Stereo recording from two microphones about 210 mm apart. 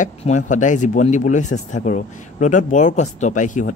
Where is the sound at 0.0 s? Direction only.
35° left (ahead or behind).